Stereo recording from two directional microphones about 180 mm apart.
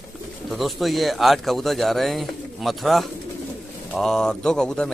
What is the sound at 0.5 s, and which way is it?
Speech, centre (ahead or behind).